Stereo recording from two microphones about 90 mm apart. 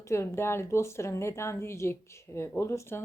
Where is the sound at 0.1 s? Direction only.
30° left (ahead or behind).